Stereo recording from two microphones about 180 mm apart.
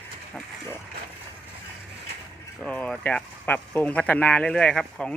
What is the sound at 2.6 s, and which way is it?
Speech, 5° left (ahead or behind).